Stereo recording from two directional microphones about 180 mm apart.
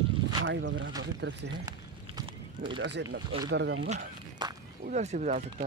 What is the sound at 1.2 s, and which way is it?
Speech, 70° right (ahead or behind).